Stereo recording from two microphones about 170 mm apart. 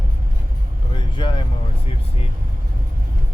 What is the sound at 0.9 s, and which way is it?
Vehicle, 30° left (ahead or behind).